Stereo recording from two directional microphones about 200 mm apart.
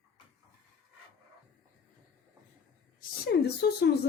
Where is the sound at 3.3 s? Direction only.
55° left (ahead or behind).